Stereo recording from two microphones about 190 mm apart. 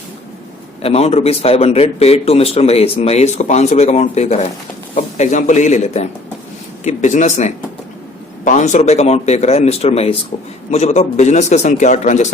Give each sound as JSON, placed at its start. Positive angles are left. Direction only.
{"t": 0.8, "sound": "a man's voice", "side_deg": 30}